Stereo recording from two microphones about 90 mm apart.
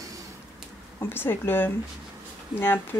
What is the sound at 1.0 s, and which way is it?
Speech, 25° left (ahead or behind).